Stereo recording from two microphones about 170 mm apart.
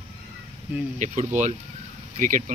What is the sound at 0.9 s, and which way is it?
Speech, 45° right (ahead or behind).